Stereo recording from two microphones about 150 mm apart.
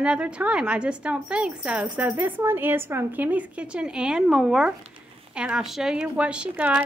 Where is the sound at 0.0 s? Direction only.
5° right (ahead or behind).